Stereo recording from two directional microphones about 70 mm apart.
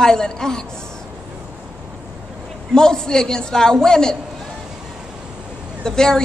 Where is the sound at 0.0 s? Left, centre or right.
Centre.